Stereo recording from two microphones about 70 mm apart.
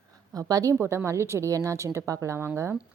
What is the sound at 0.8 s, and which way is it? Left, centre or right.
Speech, right.